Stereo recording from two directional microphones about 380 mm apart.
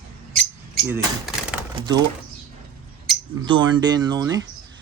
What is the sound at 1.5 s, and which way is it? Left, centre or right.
Speech, centre.